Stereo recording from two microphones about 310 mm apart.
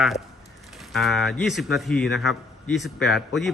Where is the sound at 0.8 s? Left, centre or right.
Centre.